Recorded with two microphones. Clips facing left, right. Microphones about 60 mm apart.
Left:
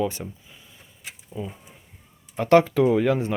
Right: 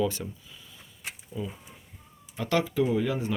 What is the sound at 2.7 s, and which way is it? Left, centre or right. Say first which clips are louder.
Speech: left 6 dB; left.